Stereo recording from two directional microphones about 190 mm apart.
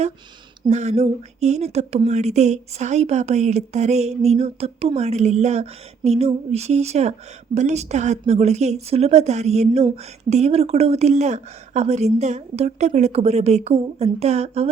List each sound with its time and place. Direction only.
0.7 s a woman's voice: 35° right (ahead or behind)